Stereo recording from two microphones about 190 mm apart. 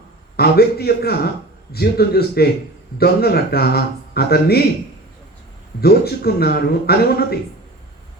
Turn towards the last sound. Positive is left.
turn(degrees=55)  # may be behind; listen again after turning